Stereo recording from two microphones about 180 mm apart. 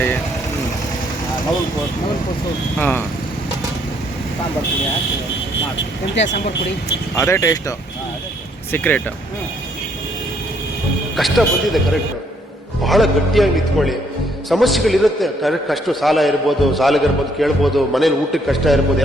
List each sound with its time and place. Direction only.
2.7 s speech: 10° left (ahead or behind)
7.2 s speech: 15° left (ahead or behind)
8.7 s speech: 10° left (ahead or behind)
11.2 s a man's voice: centre (ahead or behind)
12.8 s a man's voice: centre (ahead or behind)